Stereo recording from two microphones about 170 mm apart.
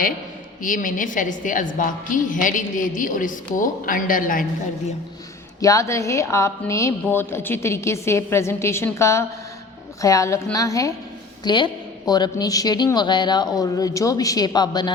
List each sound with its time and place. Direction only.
0.6 s a woman's voice: 50° left (ahead or behind)
5.5 s a woman's voice: 20° left (ahead or behind)